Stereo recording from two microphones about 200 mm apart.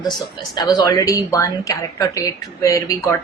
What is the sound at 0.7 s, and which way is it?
Speech, 15° left (ahead or behind).